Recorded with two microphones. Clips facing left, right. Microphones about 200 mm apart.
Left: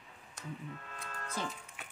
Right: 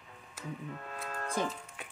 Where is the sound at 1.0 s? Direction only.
45° right (ahead or behind).